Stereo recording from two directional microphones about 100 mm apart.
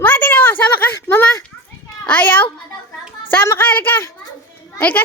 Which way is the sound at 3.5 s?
20° left (ahead or behind).